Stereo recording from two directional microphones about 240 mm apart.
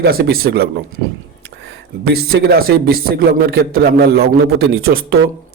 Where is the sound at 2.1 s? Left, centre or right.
Right.